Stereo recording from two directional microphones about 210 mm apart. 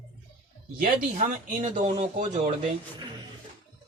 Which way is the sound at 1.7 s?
35° right (ahead or behind).